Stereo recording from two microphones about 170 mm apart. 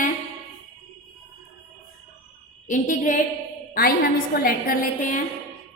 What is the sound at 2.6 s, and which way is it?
Speech, 45° left (ahead or behind).